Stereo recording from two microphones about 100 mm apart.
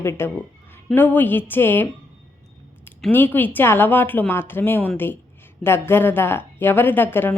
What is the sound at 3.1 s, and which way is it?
A woman's voice, 20° left (ahead or behind).